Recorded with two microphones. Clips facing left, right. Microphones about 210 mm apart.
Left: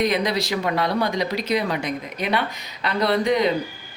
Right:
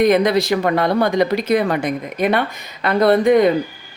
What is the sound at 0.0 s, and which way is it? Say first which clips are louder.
Speech: right 8 dB; 55° right (ahead or behind).